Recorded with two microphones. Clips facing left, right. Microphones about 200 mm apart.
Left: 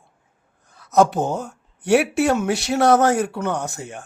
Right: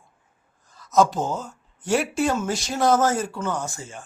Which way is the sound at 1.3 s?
65° left (ahead or behind).